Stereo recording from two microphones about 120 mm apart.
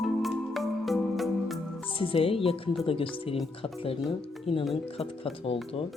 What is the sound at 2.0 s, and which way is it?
Speech, 50° left (ahead or behind).